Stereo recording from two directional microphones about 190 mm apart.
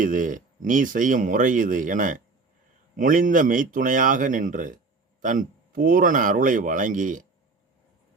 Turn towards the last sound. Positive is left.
turn(degrees=-45)  # may be behind; listen again after turning